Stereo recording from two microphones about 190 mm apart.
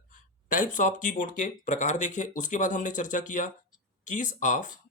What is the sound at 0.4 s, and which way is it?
Speech, 45° left (ahead or behind).